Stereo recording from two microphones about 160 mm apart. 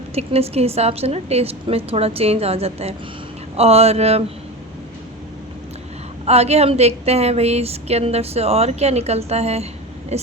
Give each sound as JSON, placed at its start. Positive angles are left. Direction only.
{"t": 0.1, "sound": "a woman's voice", "side_deg": -40}
{"t": 6.2, "sound": "a woman's voice", "side_deg": -40}